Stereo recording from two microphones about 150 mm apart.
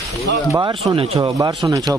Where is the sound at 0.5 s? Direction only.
25° right (ahead or behind).